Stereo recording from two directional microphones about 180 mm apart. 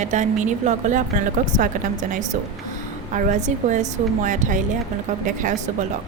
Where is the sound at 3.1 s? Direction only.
45° right (ahead or behind).